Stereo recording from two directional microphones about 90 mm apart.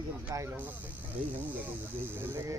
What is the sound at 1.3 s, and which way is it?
Speech, 20° right (ahead or behind).